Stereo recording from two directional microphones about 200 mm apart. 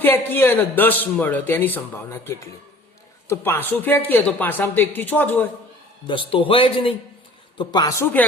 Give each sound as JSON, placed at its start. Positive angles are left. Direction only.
{"t": 0.0, "sound": "a man's voice", "side_deg": 10}
{"t": 6.1, "sound": "a man's voice", "side_deg": 25}